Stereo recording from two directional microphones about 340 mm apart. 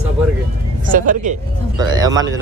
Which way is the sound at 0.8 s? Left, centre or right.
Right.